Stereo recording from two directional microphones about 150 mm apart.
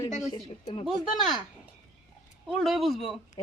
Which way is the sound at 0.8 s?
Centre (ahead or behind).